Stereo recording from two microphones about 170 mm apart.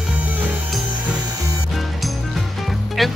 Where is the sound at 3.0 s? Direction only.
Centre (ahead or behind).